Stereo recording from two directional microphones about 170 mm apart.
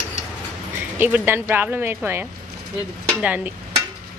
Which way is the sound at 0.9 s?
10° right (ahead or behind).